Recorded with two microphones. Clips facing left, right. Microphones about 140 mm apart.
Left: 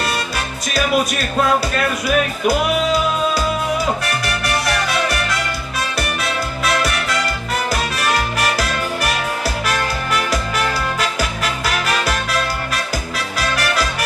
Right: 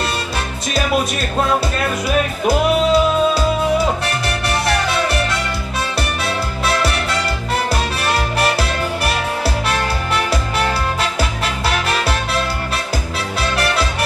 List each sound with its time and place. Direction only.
2.0 s music: 25° right (ahead or behind)
11.0 s music: 30° right (ahead or behind)